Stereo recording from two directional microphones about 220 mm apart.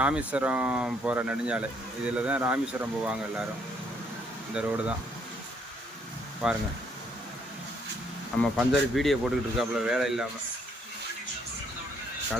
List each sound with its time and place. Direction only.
0.0 s speech: 5° right (ahead or behind)
4.6 s speech: 5° right (ahead or behind)
6.4 s speech: centre (ahead or behind)
8.4 s speech: centre (ahead or behind)